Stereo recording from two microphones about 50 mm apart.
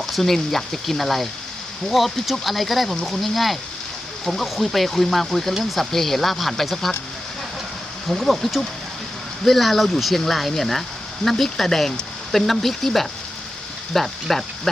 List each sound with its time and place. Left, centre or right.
0.0 s speech: centre
8.0 s speech: centre